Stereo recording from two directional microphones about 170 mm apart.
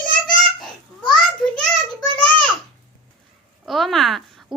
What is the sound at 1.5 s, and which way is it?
Child singing, 5° left (ahead or behind).